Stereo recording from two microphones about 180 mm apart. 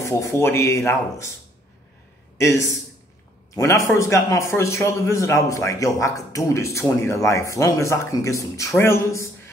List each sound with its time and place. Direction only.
0.0 s a man's voice: 15° left (ahead or behind)
2.3 s a man's voice: 15° left (ahead or behind)